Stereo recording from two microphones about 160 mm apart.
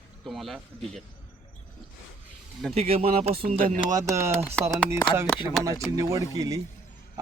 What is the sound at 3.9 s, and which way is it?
Speech, 20° right (ahead or behind).